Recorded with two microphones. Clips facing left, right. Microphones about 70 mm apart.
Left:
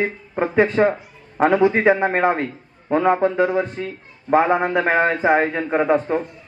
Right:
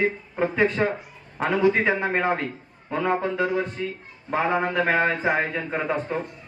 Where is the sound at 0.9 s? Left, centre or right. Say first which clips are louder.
Left 6 dB; left.